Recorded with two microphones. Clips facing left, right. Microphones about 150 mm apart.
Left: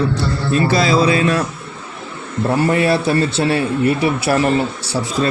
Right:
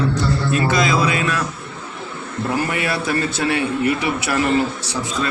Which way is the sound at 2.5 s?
30° left (ahead or behind).